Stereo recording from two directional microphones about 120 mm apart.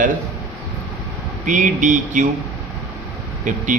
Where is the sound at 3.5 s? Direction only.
90° right.